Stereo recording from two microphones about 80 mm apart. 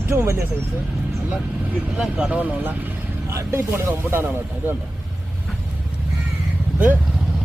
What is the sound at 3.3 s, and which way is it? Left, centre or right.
Speech, right.